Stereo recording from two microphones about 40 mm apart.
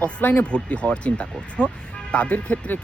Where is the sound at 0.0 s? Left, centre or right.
Left.